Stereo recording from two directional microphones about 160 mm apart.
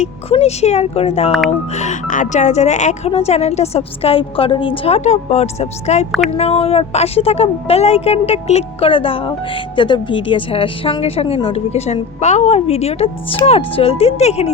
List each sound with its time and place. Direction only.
0.0 s a woman's voice: 40° left (ahead or behind)